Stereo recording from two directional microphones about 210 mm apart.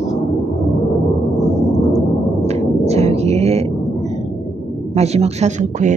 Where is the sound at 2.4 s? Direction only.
30° right (ahead or behind).